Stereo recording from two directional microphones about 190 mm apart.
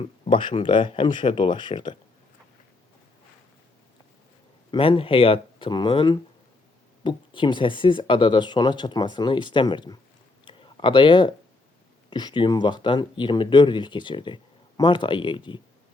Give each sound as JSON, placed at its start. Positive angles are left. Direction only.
{"t": 0.3, "sound": "speech", "side_deg": 25}
{"t": 4.7, "sound": "speech", "side_deg": 30}
{"t": 10.4, "sound": "a sound", "side_deg": 25}
{"t": 12.1, "sound": "speech", "side_deg": 25}